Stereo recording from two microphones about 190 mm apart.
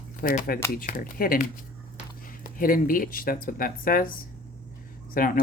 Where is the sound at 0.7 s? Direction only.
45° left (ahead or behind).